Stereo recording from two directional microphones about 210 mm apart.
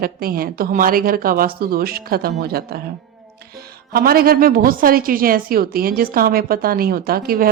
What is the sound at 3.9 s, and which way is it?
A woman's voice, 45° right (ahead or behind).